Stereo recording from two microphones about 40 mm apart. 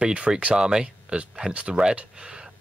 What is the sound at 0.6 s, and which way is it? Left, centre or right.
Speech, centre.